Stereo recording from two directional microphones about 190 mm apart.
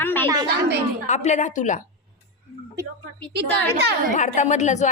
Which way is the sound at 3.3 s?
60° right (ahead or behind).